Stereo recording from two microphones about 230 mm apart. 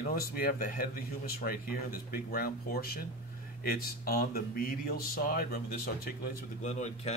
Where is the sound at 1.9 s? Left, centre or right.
Left.